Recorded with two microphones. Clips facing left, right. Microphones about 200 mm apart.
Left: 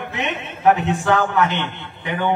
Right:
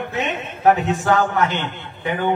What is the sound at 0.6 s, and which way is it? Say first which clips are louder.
A man's voice: even; 40° right (ahead or behind).